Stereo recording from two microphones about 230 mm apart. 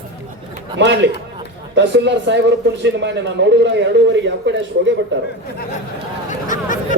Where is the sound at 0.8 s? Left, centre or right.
Right.